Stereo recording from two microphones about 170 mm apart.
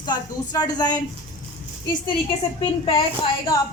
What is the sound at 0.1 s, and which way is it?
Speech, 25° left (ahead or behind).